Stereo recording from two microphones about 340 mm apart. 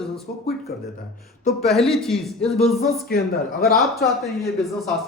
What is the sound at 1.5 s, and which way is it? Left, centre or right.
Speech, centre.